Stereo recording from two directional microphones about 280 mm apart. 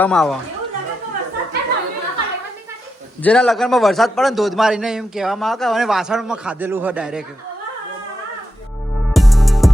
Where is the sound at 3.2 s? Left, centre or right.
Centre.